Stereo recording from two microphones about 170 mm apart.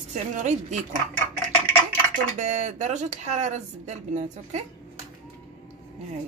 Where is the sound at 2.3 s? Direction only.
45° right (ahead or behind).